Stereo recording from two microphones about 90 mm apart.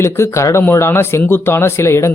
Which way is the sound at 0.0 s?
30° left (ahead or behind).